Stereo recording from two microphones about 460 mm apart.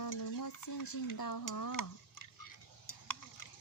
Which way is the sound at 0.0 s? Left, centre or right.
Left.